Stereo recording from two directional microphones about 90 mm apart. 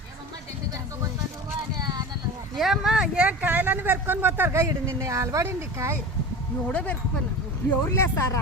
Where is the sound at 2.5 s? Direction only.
5° right (ahead or behind); by 5.9 s 30° right (ahead or behind).